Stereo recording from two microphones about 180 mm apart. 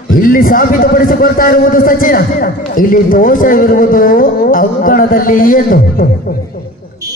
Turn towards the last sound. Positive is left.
turn(degrees=55)  # may be behind; listen again after turning